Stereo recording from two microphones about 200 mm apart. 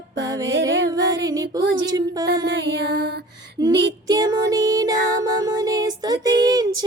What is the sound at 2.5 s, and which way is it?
Music, 60° right (ahead or behind).